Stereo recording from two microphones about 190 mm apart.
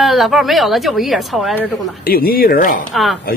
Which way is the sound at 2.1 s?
50° left (ahead or behind).